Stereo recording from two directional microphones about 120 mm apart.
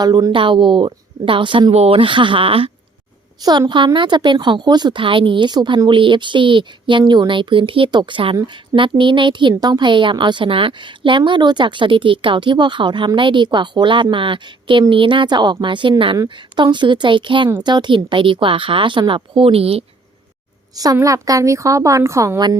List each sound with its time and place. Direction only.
0.0 s a woman's voice: 35° right (ahead or behind)
1.7 s a woman's voice: 55° right (ahead or behind)
3.7 s a woman's voice: 40° right (ahead or behind)
20.7 s a woman's voice: 30° right (ahead or behind)